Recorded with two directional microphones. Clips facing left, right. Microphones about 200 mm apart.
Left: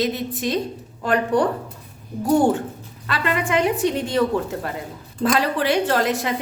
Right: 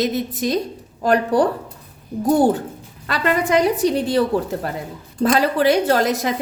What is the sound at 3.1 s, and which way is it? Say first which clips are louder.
Speech: right 4 dB; 40° right (ahead or behind).